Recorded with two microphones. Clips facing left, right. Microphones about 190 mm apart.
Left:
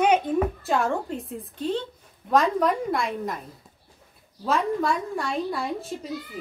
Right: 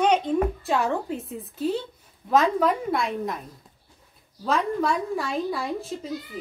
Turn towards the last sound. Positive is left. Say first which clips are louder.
# right 1 dB
turn(degrees=0)  # may be behind; listen again after turning